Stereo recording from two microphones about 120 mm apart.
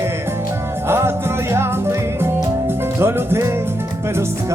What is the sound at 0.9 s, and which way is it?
Music, 20° right (ahead or behind).